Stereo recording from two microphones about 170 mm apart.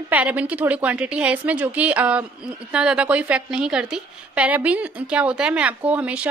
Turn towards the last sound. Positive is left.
turn(degrees=-5)  # may be behind; listen again after turning